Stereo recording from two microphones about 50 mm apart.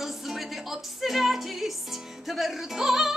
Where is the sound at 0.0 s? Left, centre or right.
Centre.